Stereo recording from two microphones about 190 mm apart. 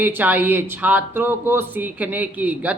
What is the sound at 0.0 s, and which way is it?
Speech, 10° right (ahead or behind).